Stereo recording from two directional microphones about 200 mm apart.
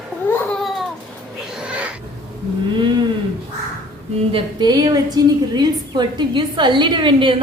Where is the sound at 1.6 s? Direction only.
5° right (ahead or behind).